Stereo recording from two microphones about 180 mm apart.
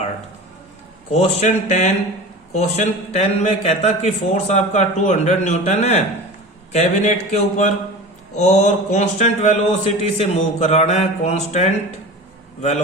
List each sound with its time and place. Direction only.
1.1 s a man's voice: 35° left (ahead or behind)